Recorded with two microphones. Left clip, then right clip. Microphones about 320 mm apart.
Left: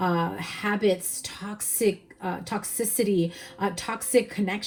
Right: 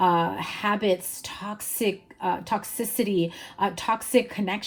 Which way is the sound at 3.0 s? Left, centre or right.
Right.